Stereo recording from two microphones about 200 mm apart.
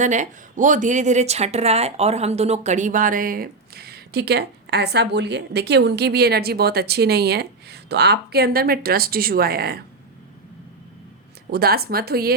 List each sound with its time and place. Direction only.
0.0 s speech: 35° right (ahead or behind)
11.5 s speech: 50° right (ahead or behind)